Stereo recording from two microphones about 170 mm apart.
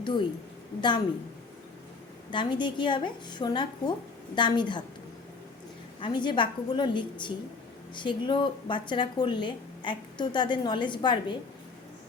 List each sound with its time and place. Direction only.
0.0 s a woman's voice: 25° left (ahead or behind)
2.3 s a woman's voice: 25° left (ahead or behind)
6.0 s a woman's voice: 25° left (ahead or behind)